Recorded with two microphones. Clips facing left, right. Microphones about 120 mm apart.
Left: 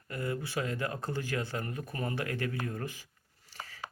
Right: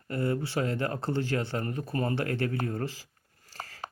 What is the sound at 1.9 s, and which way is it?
A man's voice, 40° right (ahead or behind).